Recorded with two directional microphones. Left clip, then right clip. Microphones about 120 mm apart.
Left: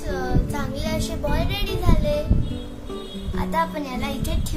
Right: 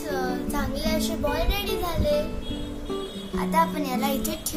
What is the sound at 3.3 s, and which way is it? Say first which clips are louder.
Speech: right 1 dB; 35° left (ahead or behind).